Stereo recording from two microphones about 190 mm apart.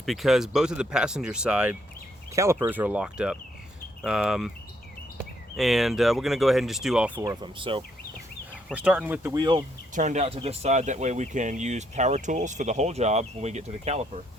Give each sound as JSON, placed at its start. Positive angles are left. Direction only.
{"t": 0.0, "sound": "speech", "side_deg": 0}
{"t": 2.3, "sound": "speech", "side_deg": -15}
{"t": 5.5, "sound": "speech", "side_deg": 0}
{"t": 7.2, "sound": "speech", "side_deg": -20}
{"t": 8.7, "sound": "speech", "side_deg": -5}
{"t": 9.4, "sound": "speech", "side_deg": -25}
{"t": 9.9, "sound": "speech", "side_deg": -40}